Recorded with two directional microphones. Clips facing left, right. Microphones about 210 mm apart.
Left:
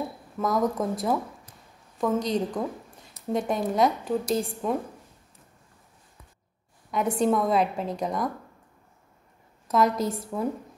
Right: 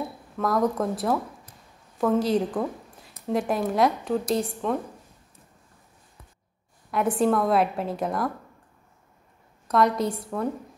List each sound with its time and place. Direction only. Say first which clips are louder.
0.4 s a woman's voice: right 1 dB; centre (ahead or behind)
6.9 s a woman's voice: right 1 dB; centre (ahead or behind)
9.7 s a woman's voice: right 1 dB; centre (ahead or behind)